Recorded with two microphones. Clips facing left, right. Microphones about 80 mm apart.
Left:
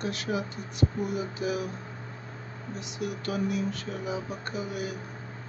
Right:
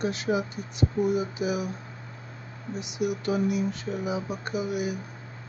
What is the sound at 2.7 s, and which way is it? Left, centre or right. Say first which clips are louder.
Speech: right 6 dB; centre.